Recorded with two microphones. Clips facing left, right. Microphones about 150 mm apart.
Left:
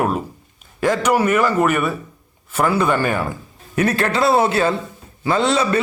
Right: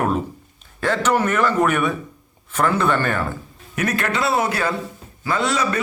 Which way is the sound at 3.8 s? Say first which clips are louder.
Left 4 dB; 30° left (ahead or behind).